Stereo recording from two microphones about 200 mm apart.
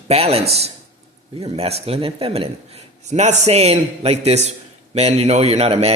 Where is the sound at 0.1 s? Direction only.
30° right (ahead or behind).